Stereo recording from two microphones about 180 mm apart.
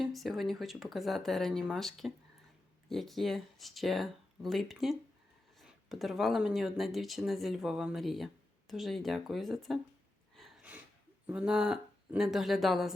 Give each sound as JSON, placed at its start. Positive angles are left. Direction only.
{"t": 0.0, "sound": "speech", "side_deg": 0}
{"t": 10.3, "sound": "a sound", "side_deg": -5}
{"t": 11.3, "sound": "speech", "side_deg": -5}